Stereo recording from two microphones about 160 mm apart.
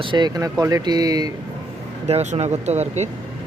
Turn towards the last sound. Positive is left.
turn(degrees=-45)  # may be behind; listen again after turning